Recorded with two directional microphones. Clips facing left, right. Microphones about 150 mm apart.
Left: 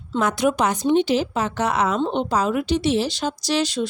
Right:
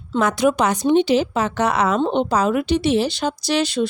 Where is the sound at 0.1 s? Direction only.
90° right.